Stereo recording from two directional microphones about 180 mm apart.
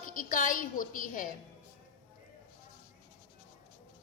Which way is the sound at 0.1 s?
50° left (ahead or behind).